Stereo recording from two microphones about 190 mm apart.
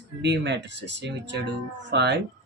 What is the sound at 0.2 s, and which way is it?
Speech, 65° right (ahead or behind).